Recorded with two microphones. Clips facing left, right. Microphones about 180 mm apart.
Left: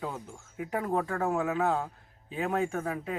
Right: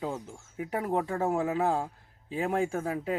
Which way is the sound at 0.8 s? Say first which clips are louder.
Right 1 dB; 20° right (ahead or behind).